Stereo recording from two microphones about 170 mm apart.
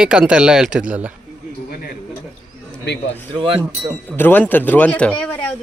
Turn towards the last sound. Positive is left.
turn(degrees=5)  # may be behind; listen again after turning